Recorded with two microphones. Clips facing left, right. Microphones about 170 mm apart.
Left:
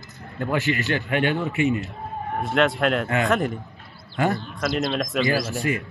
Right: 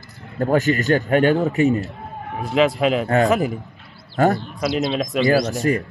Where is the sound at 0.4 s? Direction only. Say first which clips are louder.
Right 6 dB; 40° right (ahead or behind).